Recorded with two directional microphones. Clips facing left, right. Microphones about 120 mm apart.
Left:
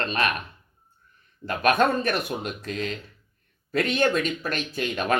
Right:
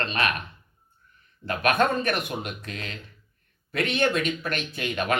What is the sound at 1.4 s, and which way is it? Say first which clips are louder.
Speech: left 2 dB; 40° left (ahead or behind).